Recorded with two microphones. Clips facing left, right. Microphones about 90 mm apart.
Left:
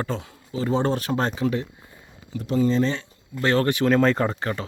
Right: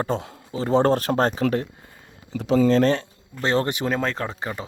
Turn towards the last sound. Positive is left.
turn(degrees=-10)  # may be behind; listen again after turning